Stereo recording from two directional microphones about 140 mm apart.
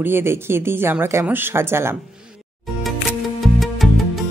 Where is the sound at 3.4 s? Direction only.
Centre (ahead or behind).